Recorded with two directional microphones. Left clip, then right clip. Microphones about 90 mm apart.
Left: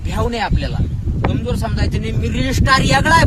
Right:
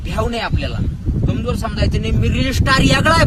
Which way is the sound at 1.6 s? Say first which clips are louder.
Right 2 dB; 45° left (ahead or behind).